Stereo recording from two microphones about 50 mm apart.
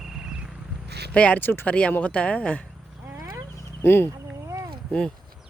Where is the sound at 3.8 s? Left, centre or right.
Left.